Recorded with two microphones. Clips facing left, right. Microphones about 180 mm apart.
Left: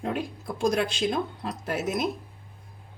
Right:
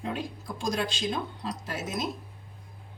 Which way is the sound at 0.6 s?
55° left (ahead or behind).